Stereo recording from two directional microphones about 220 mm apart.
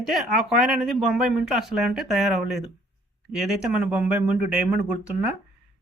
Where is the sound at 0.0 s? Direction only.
Centre (ahead or behind).